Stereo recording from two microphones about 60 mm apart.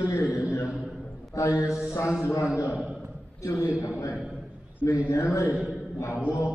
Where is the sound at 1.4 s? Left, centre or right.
Left.